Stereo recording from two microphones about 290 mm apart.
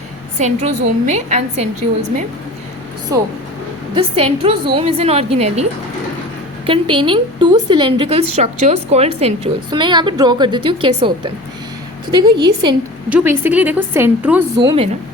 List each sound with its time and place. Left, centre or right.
0.3 s a woman's voice: right
3.1 s a woman's voice: centre
6.7 s a woman's voice: centre